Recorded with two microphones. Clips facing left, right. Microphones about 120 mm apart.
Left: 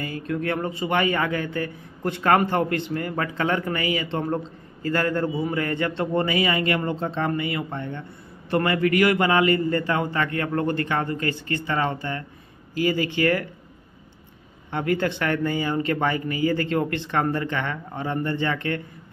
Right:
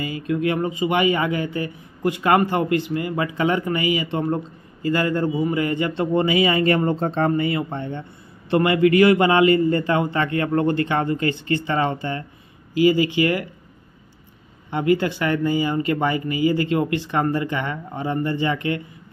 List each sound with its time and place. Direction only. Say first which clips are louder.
0.0 s speech: right 4 dB; 15° right (ahead or behind)
6.6 s a man's voice: right 5 dB; 35° right (ahead or behind); by 13.5 s 10° right (ahead or behind)
15.0 s speech: right 2 dB; 10° right (ahead or behind)